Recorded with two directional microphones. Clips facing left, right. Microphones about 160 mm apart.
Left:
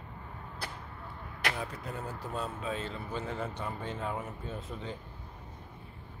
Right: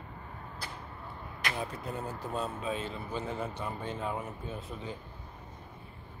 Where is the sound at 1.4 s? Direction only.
70° left (ahead or behind).